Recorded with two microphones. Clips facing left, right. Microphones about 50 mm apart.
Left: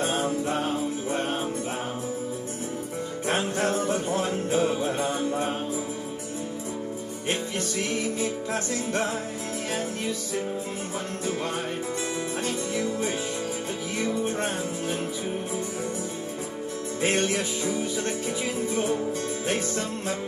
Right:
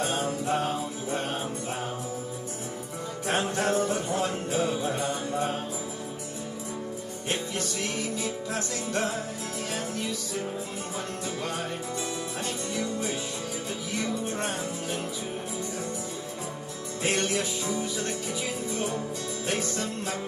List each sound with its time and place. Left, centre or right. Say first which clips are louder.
0.0 s music: left 3 dB; left
3.5 s music: left 1 dB; left
8.5 s music: left 3 dB; left
17.0 s music: left 3 dB; left
19.4 s music: even; left